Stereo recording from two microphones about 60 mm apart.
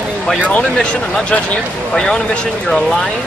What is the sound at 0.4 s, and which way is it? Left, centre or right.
Speech, left.